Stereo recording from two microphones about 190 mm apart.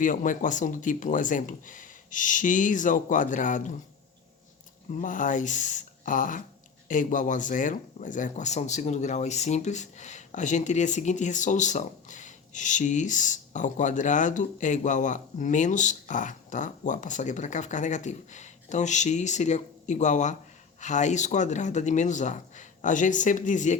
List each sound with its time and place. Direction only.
0.0 s speech: 45° left (ahead or behind)
4.9 s speech: 45° left (ahead or behind)